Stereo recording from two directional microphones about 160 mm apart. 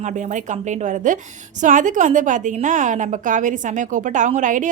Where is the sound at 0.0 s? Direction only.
50° right (ahead or behind).